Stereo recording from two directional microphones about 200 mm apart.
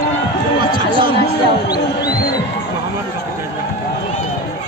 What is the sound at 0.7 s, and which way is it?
Run, 25° right (ahead or behind).